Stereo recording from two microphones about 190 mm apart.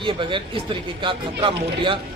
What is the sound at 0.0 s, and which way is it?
Speech, 25° right (ahead or behind).